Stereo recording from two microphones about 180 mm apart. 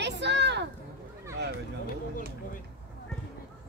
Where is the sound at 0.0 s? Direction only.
75° right (ahead or behind).